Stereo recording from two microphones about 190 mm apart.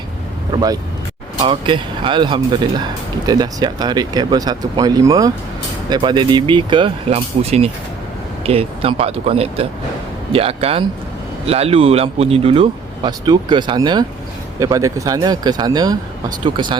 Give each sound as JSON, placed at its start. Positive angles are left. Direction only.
{"t": 0.5, "sound": "speech", "side_deg": -20}